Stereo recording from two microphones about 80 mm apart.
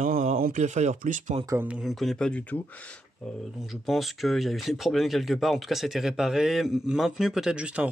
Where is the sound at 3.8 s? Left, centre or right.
Centre.